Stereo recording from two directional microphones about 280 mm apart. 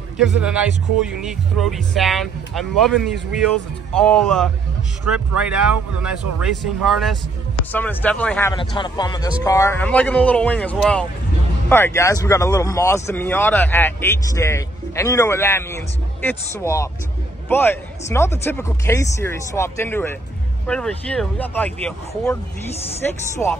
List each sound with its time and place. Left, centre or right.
0.2 s speech: centre